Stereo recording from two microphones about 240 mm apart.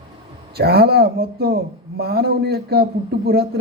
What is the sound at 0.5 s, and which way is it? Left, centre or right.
A man's voice, right.